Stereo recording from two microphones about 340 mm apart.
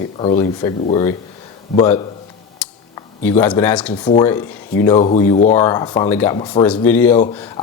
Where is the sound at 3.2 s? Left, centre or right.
Centre.